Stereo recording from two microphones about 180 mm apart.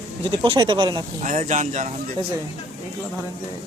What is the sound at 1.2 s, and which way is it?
Speech, 45° right (ahead or behind).